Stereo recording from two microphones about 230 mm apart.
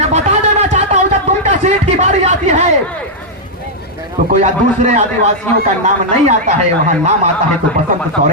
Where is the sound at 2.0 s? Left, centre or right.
Right.